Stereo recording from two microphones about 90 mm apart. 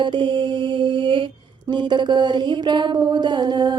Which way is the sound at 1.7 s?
55° right (ahead or behind).